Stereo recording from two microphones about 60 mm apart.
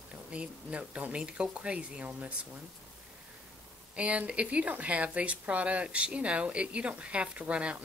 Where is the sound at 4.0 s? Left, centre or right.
Right.